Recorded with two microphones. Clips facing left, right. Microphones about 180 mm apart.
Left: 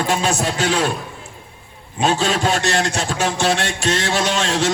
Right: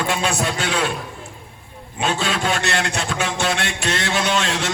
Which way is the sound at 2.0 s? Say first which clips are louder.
Left 4 dB; 40° left (ahead or behind).